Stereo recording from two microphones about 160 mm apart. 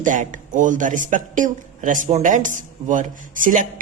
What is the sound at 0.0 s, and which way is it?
Speech, 55° right (ahead or behind).